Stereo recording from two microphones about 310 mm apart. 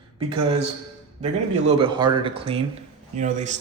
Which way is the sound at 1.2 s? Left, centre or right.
Centre.